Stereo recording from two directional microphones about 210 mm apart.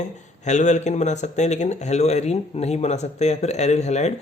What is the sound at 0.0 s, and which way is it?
Speech, 35° left (ahead or behind).